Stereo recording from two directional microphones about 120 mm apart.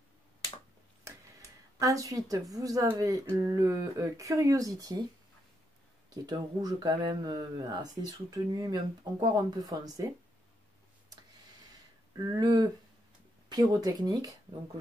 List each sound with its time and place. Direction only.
1.8 s speech: 30° right (ahead or behind)
6.2 s speech: 35° right (ahead or behind)
12.2 s speech: 35° right (ahead or behind)